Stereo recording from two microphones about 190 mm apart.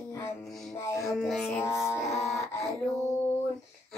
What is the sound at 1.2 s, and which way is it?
Music, centre (ahead or behind).